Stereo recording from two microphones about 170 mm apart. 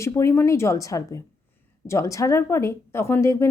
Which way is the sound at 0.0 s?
15° left (ahead or behind).